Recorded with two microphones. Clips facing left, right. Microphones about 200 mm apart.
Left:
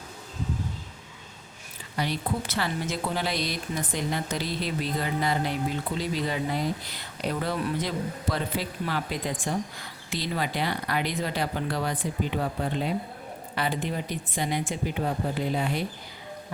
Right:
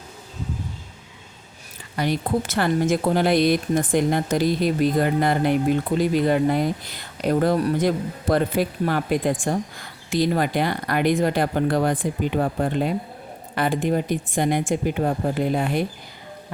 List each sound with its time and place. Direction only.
2.0 s speech: 50° right (ahead or behind)